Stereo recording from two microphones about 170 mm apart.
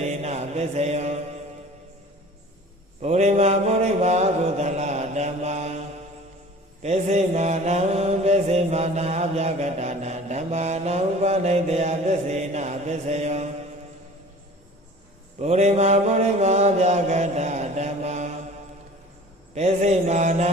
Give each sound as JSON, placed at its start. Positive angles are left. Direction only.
{"t": 0.0, "sound": "mantra", "side_deg": -40}
{"t": 3.0, "sound": "mantra", "side_deg": -40}
{"t": 6.8, "sound": "mantra", "side_deg": -40}
{"t": 15.4, "sound": "mantra", "side_deg": -40}
{"t": 19.5, "sound": "mantra", "side_deg": -40}